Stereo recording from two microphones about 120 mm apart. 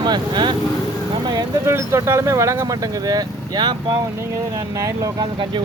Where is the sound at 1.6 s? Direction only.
20° right (ahead or behind).